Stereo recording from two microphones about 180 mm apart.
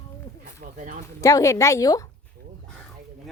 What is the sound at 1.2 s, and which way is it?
Speech, 20° left (ahead or behind).